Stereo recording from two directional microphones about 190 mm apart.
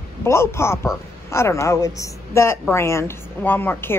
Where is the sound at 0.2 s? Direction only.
15° left (ahead or behind).